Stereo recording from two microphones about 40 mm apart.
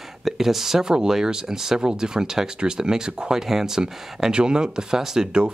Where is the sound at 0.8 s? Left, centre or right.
Centre.